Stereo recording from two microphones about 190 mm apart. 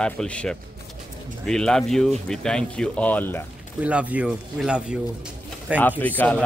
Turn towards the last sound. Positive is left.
turn(degrees=10)  # may be behind; listen again after turning